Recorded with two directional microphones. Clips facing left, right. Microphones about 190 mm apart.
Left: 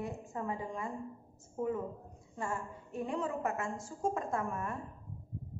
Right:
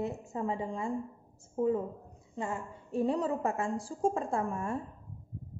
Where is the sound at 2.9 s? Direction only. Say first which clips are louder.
Right 6 dB; 35° right (ahead or behind).